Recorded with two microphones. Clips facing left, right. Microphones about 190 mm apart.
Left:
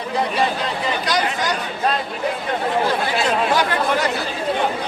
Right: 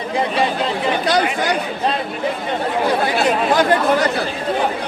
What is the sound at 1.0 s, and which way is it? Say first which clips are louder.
Speech: right 4 dB; 60° right (ahead or behind).